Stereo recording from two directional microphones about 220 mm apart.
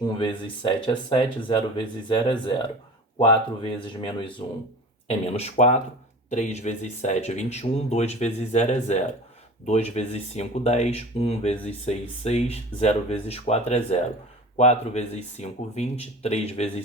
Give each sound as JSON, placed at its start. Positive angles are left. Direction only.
{"t": 0.0, "sound": "speech", "side_deg": 20}